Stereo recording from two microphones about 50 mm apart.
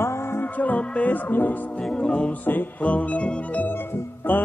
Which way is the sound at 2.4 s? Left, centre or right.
Left.